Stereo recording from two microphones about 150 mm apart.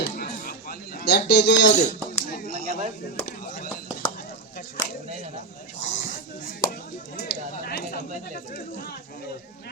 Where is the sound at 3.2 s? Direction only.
85° left.